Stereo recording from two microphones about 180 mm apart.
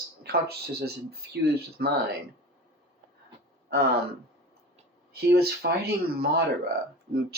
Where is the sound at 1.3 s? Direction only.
65° right (ahead or behind).